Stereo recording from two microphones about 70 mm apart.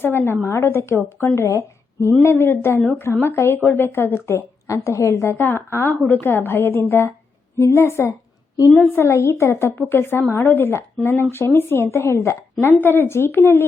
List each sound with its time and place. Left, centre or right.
0.0 s a woman's voice: left
5.4 s a woman's voice: left